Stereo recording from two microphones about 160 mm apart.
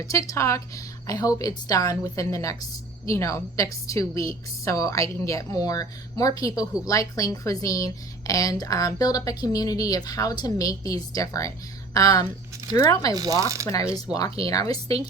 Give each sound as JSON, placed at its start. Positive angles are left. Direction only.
{"t": 0.0, "sound": "a woman's voice", "side_deg": 20}
{"t": 13.1, "sound": "speech", "side_deg": -20}
{"t": 13.7, "sound": "a woman's voice", "side_deg": 20}